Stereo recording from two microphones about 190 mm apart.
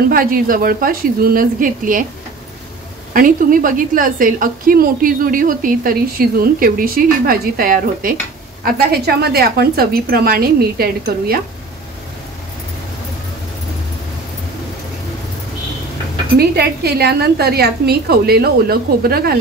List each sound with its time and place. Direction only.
0.1 s a woman's voice: 50° right (ahead or behind)
3.1 s a woman's voice: 45° right (ahead or behind)
16.3 s a woman's voice: 55° right (ahead or behind)